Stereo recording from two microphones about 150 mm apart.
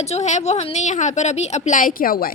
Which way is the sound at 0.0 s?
50° left (ahead or behind).